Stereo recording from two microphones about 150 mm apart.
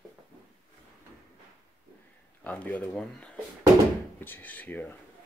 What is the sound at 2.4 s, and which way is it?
Speech, 10° left (ahead or behind).